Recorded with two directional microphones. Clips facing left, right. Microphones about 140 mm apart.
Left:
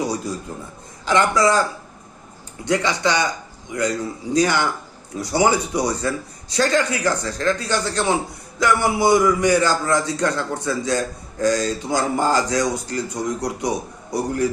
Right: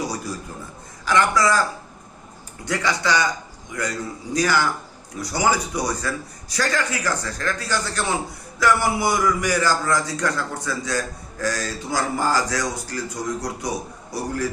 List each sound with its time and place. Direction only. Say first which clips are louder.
1.0 s a man's voice: left 2 dB; 25° left (ahead or behind)
2.6 s a man's voice: left 3 dB; 20° left (ahead or behind)